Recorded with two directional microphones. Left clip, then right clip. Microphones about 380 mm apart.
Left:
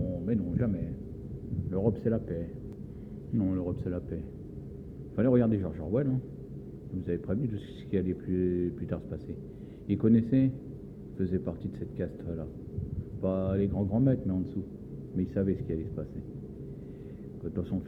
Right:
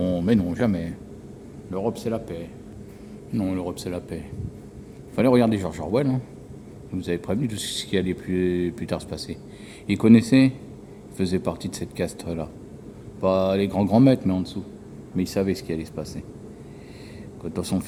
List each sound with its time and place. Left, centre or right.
0.1 s speech: centre
1.7 s speech: centre
17.5 s speech: centre